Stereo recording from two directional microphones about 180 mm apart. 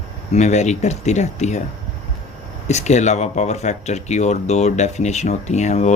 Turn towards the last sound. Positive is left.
turn(degrees=40)  # may be behind; listen again after turning